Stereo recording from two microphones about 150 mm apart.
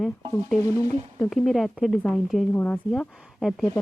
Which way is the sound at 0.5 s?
25° left (ahead or behind).